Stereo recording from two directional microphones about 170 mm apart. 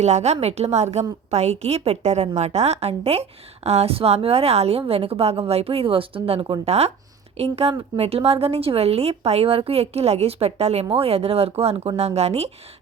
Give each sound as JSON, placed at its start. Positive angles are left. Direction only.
{"t": 0.0, "sound": "a woman's voice", "side_deg": -40}